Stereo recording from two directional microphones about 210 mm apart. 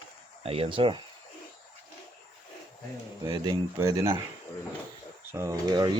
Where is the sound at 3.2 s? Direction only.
20° right (ahead or behind).